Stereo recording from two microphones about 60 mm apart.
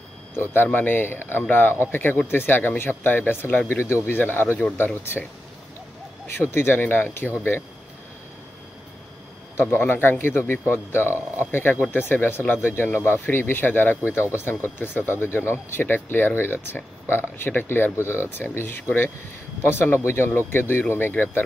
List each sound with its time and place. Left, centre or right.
0.4 s speech: left
6.5 s speech: left
9.6 s speech: left